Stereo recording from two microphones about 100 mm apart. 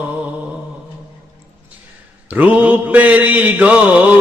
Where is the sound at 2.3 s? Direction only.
15° right (ahead or behind).